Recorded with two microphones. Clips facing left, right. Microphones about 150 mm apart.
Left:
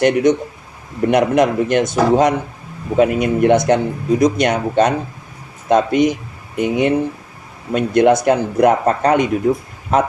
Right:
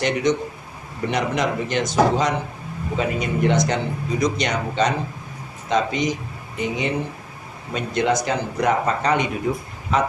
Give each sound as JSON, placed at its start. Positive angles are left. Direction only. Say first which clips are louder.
{"t": 0.0, "sound": "speech", "louder": "left 7 dB", "side_deg": 55}